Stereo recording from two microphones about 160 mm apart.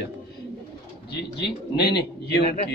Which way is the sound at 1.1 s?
90° left.